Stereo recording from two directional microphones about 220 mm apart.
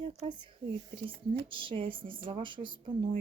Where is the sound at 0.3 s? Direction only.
20° right (ahead or behind).